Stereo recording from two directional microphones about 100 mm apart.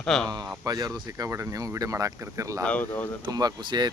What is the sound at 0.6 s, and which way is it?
Speech, 40° right (ahead or behind).